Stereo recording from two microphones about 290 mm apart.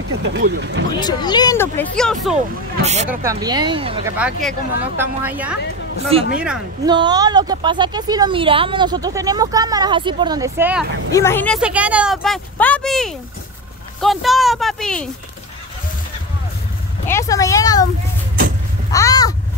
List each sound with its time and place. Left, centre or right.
0.3 s speech: right
0.9 s speech: centre
2.8 s speech: right
3.1 s speech: centre
4.4 s speech: centre
6.1 s speech: centre
11.1 s speech: centre
17.1 s speech: centre
18.9 s a sound: centre